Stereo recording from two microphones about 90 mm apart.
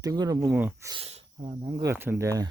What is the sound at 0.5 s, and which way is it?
Speech, 25° right (ahead or behind).